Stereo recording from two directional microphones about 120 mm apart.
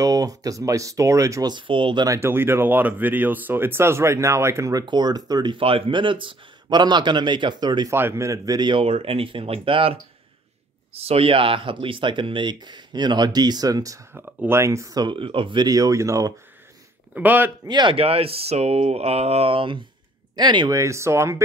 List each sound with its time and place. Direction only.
0.0 s speech: 30° right (ahead or behind)
2.0 s speech: 20° right (ahead or behind)
4.8 s speech: 35° right (ahead or behind)
5.6 s speech: 50° right (ahead or behind)
7.9 s speech: 20° right (ahead or behind); by 8.8 s 35° right (ahead or behind)
8.8 s speech: 55° right (ahead or behind); by 15.0 s 25° right (ahead or behind)
15.0 s speech: 45° right (ahead or behind); by 16.3 s 25° right (ahead or behind)
17.1 s speech: 15° right (ahead or behind)
17.6 s speech: 35° right (ahead or behind)
17.9 s speech: 55° right (ahead or behind)
20.8 s speech: 25° right (ahead or behind)